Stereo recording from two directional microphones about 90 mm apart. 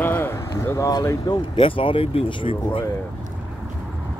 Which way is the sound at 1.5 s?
80° left.